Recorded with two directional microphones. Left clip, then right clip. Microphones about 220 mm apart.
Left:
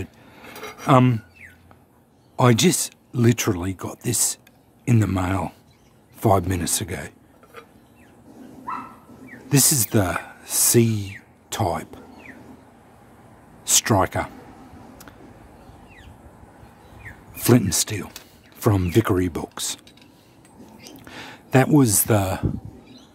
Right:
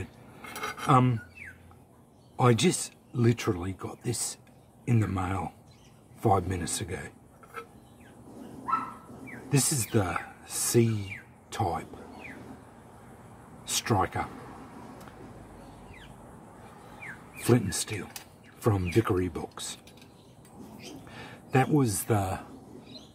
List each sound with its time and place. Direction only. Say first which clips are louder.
0.8 s speech: left 7 dB; 50° left (ahead or behind)
2.3 s speech: left 6 dB; 50° left (ahead or behind)
9.5 s speech: left 8 dB; 50° left (ahead or behind)
13.7 s speech: left 8 dB; 50° left (ahead or behind)
17.4 s speech: left 8 dB; 50° left (ahead or behind)
21.1 s speech: left 8 dB; 50° left (ahead or behind)